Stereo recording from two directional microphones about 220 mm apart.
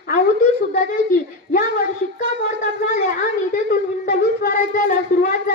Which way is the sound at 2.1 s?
35° left (ahead or behind).